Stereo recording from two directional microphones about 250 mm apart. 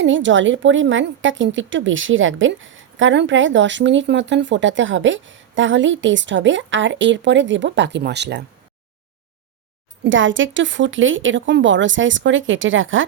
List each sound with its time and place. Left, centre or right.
0.0 s a woman's voice: right
10.0 s a woman's voice: right